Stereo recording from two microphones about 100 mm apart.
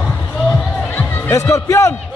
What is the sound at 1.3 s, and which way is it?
Music, 30° left (ahead or behind).